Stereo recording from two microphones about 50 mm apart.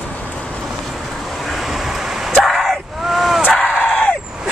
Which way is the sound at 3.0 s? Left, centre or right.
Centre.